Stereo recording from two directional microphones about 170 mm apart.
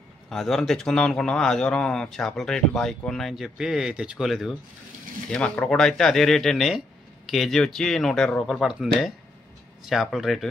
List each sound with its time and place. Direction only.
0.3 s a man's voice: centre (ahead or behind)